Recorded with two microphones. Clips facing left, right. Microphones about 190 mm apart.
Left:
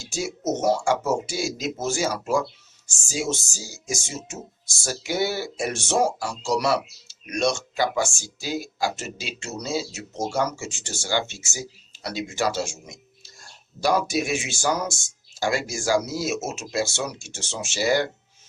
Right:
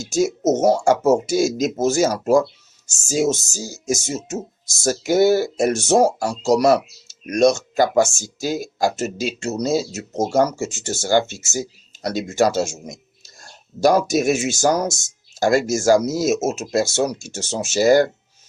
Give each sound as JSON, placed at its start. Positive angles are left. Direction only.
{"t": 0.0, "sound": "speech", "side_deg": -40}